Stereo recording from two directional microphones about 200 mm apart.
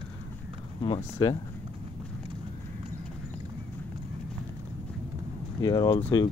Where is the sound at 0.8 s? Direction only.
25° left (ahead or behind).